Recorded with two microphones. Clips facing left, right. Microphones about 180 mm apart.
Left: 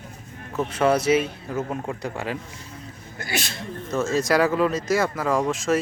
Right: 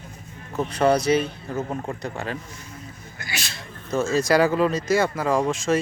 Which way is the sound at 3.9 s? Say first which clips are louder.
Right 2 dB; centre (ahead or behind).